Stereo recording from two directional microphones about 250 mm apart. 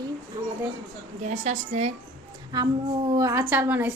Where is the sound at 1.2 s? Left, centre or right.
Right.